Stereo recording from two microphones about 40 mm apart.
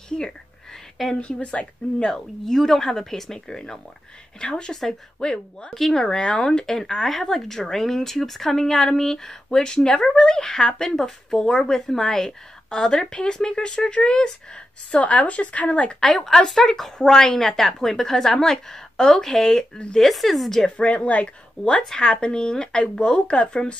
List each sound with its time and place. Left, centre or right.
1.2 s speech: left
2.0 s a woman's voice: centre
5.8 s a woman's voice: centre
15.0 s a woman's voice: left
16.3 s a woman's voice: centre
20.8 s a woman's voice: left
21.9 s speech: left